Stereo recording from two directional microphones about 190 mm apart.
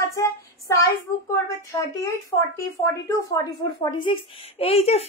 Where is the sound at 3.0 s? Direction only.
20° left (ahead or behind).